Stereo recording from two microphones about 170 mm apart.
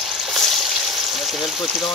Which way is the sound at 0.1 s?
Centre (ahead or behind).